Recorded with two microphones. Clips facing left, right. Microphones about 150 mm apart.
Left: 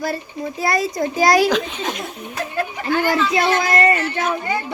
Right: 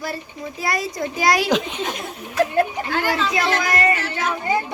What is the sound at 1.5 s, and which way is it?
Speech, 20° right (ahead or behind).